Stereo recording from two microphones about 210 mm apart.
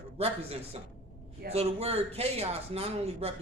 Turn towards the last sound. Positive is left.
turn(degrees=-30)  # may be behind; listen again after turning